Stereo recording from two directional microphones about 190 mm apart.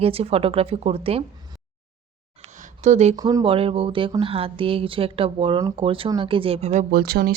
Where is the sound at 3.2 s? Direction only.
20° right (ahead or behind).